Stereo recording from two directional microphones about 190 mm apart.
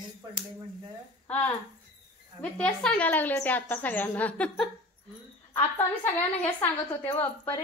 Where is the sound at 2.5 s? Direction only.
5° left (ahead or behind).